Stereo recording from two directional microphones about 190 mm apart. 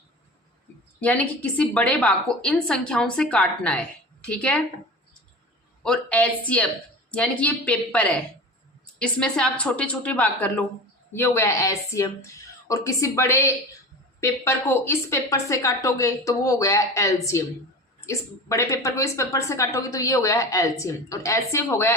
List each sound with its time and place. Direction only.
1.0 s a woman's voice: 10° left (ahead or behind)
5.8 s speech: 5° left (ahead or behind)